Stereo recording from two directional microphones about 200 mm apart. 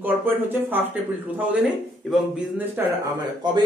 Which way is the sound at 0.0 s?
10° right (ahead or behind).